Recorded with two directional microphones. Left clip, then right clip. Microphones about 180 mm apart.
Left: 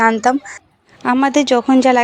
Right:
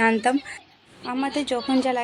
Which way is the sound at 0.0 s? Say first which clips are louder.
Left 7 dB; 5° left (ahead or behind).